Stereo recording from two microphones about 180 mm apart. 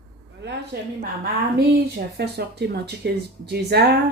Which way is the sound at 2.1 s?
65° right (ahead or behind).